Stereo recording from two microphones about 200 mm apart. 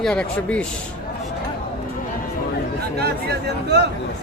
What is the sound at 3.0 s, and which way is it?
Speech, 55° right (ahead or behind).